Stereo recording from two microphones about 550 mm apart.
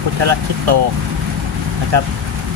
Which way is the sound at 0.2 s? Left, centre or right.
Right.